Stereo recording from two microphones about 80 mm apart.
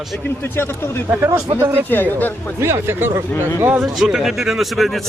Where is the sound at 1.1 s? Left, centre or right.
Right.